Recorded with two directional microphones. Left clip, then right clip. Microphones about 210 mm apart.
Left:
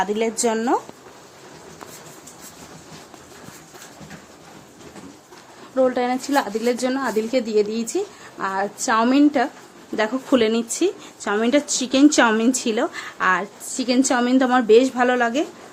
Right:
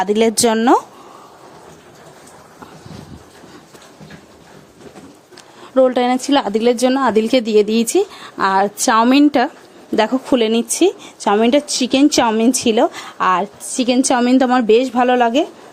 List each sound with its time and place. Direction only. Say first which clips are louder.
0.0 s speech: right 7 dB; 50° right (ahead or behind)
5.7 s speech: right 6 dB; 35° right (ahead or behind)
9.9 s speech: right 5 dB; 35° right (ahead or behind)